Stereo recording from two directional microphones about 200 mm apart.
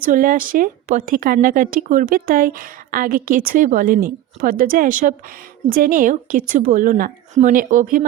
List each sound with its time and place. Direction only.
0.0 s speech: 45° right (ahead or behind)